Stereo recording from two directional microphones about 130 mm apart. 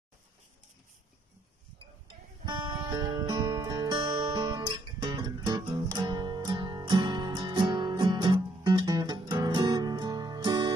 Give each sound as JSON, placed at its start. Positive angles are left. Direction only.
{"t": 2.4, "sound": "music", "side_deg": -35}